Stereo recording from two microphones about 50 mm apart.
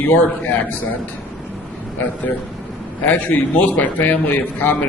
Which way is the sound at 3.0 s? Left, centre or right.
Left.